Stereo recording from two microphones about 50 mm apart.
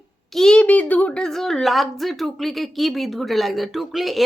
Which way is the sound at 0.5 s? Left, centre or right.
Left.